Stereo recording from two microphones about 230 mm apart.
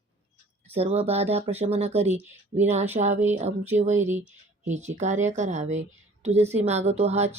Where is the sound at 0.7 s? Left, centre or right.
Right.